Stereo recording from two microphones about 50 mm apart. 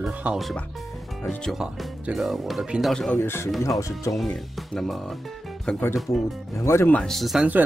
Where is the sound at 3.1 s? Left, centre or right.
Left.